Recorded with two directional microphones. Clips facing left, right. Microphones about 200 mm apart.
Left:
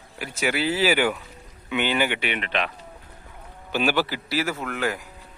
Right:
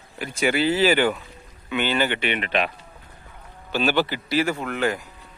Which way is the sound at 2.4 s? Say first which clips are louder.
Right 3 dB; 5° right (ahead or behind).